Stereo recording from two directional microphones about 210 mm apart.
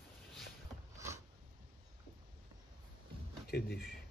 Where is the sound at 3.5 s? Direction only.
50° left (ahead or behind).